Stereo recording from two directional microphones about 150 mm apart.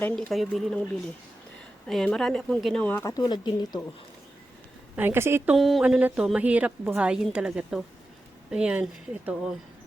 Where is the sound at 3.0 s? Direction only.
25° left (ahead or behind).